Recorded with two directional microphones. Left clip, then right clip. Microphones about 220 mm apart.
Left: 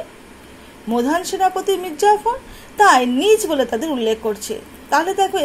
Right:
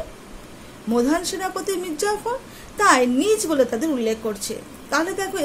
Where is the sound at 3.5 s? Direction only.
5° left (ahead or behind).